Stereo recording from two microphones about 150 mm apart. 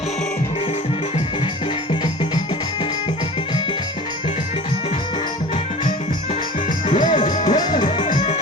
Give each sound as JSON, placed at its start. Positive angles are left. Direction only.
{"t": 6.8, "sound": "music", "side_deg": 55}